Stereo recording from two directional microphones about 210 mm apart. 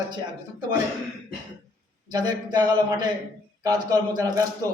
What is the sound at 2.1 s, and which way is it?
A man's voice, 20° right (ahead or behind).